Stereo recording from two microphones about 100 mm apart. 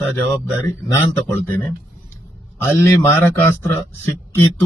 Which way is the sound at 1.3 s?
20° left (ahead or behind).